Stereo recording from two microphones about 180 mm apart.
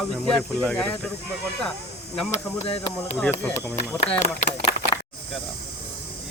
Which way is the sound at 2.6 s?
30° left (ahead or behind).